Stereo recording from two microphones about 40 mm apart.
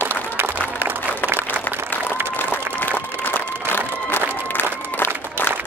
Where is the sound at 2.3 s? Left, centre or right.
Left.